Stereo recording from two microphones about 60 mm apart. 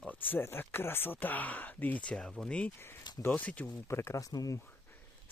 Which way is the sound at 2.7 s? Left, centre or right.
Left.